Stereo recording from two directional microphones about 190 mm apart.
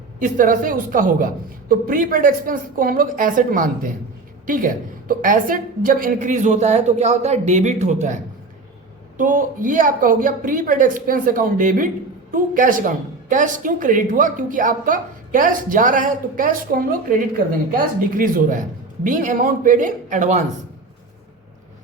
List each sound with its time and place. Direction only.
0.2 s a woman's voice: 45° right (ahead or behind)